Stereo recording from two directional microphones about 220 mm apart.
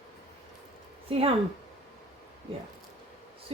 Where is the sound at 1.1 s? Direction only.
25° right (ahead or behind).